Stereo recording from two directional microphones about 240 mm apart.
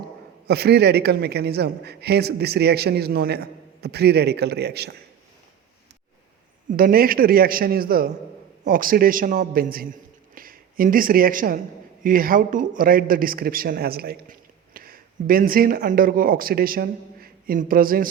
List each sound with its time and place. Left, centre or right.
0.4 s a man's voice: right
6.7 s a man's voice: right